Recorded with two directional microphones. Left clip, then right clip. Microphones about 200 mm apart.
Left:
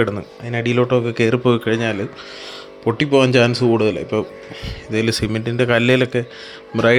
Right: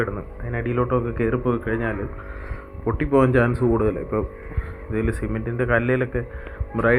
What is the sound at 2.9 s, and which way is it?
Speech, 50° left (ahead or behind).